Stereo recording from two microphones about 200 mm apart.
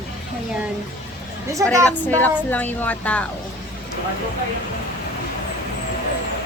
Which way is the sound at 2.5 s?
10° left (ahead or behind).